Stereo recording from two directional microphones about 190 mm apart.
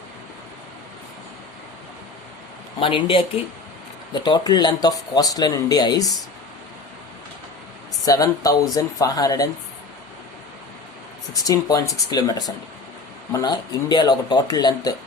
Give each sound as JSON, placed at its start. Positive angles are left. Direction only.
{"t": 2.8, "sound": "speech", "side_deg": 30}
{"t": 8.0, "sound": "speech", "side_deg": 20}
{"t": 11.4, "sound": "speech", "side_deg": 20}